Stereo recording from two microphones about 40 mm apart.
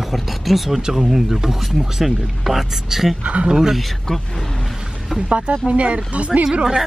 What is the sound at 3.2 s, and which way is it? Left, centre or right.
Speech, right.